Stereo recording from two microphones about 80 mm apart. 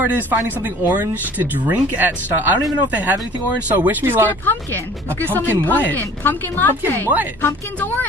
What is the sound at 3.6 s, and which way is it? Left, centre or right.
Speech, right.